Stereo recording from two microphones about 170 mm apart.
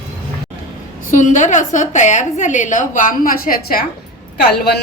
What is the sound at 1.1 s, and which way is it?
A woman's voice, 50° left (ahead or behind).